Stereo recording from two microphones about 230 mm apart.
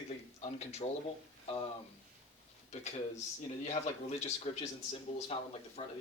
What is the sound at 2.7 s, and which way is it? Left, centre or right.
Speech, left.